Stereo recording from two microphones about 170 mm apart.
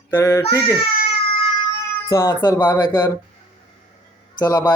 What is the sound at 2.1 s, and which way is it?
Speech, 15° left (ahead or behind).